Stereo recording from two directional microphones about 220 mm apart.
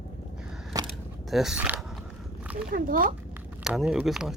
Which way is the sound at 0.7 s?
15° right (ahead or behind).